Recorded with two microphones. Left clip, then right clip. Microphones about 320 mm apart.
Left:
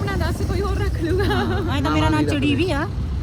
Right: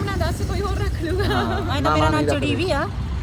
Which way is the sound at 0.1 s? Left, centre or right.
Centre.